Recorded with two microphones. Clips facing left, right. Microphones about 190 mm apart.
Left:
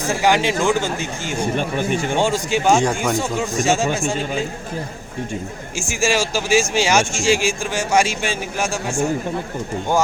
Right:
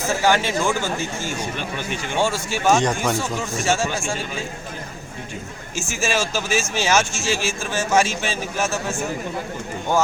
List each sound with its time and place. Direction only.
0.1 s speech: 15° left (ahead or behind)
1.4 s speech: 45° left (ahead or behind)
2.1 s speech: 15° left (ahead or behind)
5.7 s speech: 10° left (ahead or behind)